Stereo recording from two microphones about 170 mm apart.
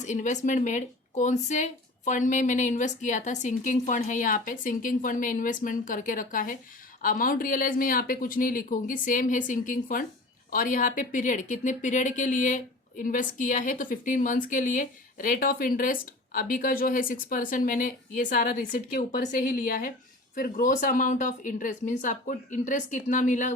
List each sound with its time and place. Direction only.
0.0 s speech: 45° left (ahead or behind)